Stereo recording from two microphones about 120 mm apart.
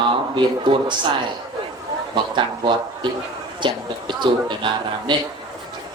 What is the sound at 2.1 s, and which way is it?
A man's voice, 40° right (ahead or behind).